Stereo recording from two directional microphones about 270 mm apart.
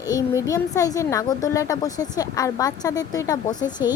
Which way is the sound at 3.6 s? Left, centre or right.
Centre.